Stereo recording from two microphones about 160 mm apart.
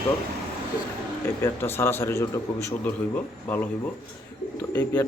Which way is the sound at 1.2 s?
15° left (ahead or behind).